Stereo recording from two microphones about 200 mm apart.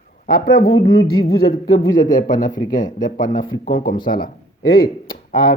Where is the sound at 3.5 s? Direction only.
25° left (ahead or behind).